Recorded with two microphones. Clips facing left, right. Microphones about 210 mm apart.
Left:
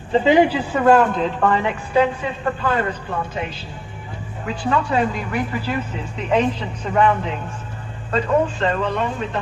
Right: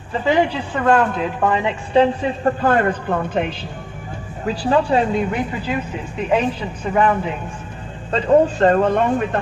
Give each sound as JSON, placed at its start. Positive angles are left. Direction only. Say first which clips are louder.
{"t": 0.1, "sound": "a man's voice", "louder": "left 3 dB", "side_deg": 15}
{"t": 1.5, "sound": "speech", "louder": "right 1 dB", "side_deg": -15}
{"t": 1.9, "sound": "a man's voice", "louder": "right 4 dB", "side_deg": -30}
{"t": 4.4, "sound": "a woman's voice", "louder": "right 4 dB", "side_deg": -35}
{"t": 6.2, "sound": "speech", "louder": "even", "side_deg": -5}
{"t": 8.5, "sound": "a man's voice", "louder": "right 6 dB", "side_deg": -45}